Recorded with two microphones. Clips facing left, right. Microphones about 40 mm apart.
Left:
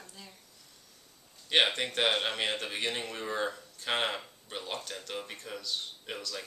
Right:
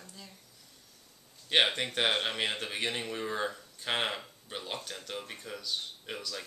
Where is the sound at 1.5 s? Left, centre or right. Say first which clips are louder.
Even; centre.